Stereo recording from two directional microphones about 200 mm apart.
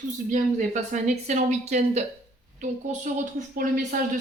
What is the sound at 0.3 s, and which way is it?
A man's voice, 40° right (ahead or behind).